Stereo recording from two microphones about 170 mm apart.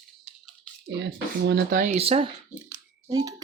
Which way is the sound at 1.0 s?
75° right (ahead or behind).